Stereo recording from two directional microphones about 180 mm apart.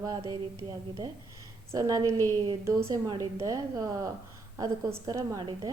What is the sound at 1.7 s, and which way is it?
A woman's voice, 20° right (ahead or behind).